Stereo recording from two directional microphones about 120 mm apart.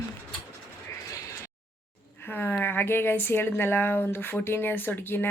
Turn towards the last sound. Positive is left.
turn(degrees=15)  # may be behind; listen again after turning